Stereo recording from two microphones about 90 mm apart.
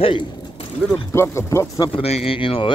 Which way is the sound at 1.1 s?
30° left (ahead or behind).